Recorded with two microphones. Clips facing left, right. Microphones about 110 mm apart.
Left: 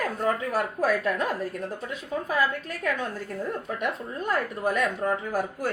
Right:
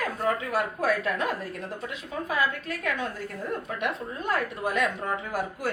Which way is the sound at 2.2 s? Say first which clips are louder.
Left 1 dB; 40° left (ahead or behind).